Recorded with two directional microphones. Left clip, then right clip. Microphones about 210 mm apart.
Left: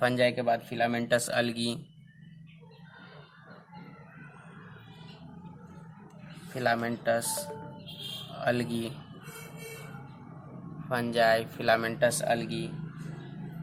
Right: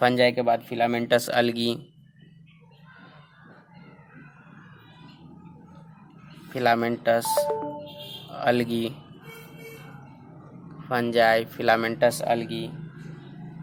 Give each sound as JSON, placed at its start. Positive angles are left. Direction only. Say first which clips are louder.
{"t": 0.0, "sound": "speech", "louder": "right 6 dB", "side_deg": -35}
{"t": 6.5, "sound": "speech", "louder": "right 6 dB", "side_deg": -40}
{"t": 8.3, "sound": "speech", "louder": "right 7 dB", "side_deg": -40}
{"t": 10.8, "sound": "speech", "louder": "right 5 dB", "side_deg": -35}